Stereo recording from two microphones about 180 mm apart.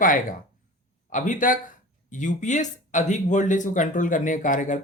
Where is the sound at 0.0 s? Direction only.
50° left (ahead or behind).